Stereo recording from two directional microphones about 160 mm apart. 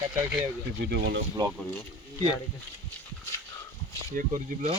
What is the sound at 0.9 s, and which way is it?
Speech, 90° right.